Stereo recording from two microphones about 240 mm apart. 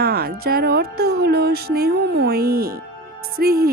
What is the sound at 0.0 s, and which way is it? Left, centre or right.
Speech, right.